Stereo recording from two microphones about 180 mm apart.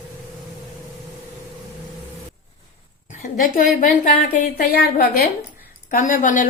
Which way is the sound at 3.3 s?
50° left (ahead or behind).